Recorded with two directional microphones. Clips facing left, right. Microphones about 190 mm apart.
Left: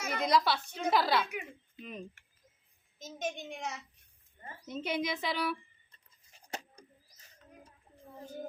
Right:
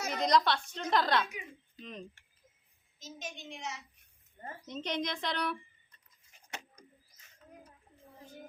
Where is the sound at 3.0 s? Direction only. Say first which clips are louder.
Left 7 dB; 50° left (ahead or behind).